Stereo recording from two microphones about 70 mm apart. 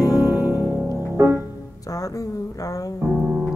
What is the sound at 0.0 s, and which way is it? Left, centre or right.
Music, left.